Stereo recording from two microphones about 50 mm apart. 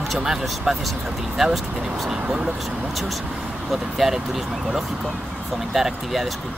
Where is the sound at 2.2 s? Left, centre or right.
Right.